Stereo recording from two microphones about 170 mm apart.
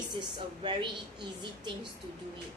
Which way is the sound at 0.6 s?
30° right (ahead or behind).